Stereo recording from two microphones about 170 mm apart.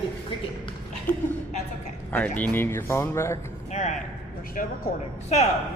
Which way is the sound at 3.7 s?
45° left (ahead or behind).